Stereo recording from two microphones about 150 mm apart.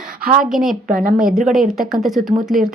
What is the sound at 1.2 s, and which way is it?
Speech, 5° right (ahead or behind).